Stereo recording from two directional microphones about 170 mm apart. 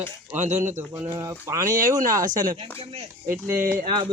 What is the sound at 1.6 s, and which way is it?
Speech, 50° right (ahead or behind).